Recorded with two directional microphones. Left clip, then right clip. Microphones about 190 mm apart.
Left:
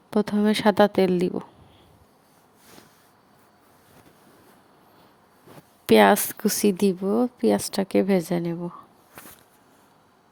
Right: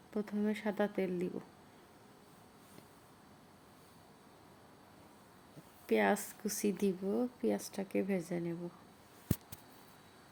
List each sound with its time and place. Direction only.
0.1 s speech: 45° left (ahead or behind)
5.8 s speech: 55° left (ahead or behind)